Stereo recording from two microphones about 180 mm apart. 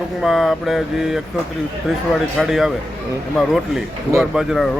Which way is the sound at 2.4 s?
Centre (ahead or behind).